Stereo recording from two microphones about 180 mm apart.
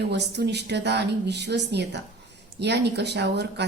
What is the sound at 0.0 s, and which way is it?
A woman's voice, 70° right (ahead or behind).